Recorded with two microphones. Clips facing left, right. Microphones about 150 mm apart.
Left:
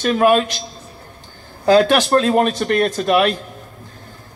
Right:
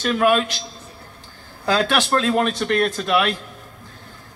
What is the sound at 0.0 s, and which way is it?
Speech, 40° left (ahead or behind).